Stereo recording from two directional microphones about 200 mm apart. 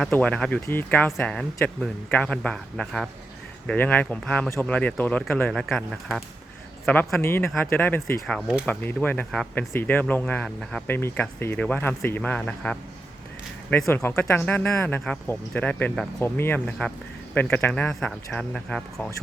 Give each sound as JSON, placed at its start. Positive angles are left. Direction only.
{"t": 0.0, "sound": "speech", "side_deg": 5}
{"t": 8.3, "sound": "speech", "side_deg": 0}